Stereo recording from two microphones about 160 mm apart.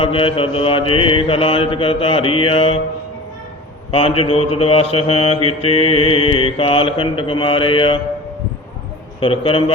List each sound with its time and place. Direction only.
0.0 s mantra: 35° left (ahead or behind)
3.9 s mantra: 35° left (ahead or behind)
9.2 s mantra: 35° left (ahead or behind)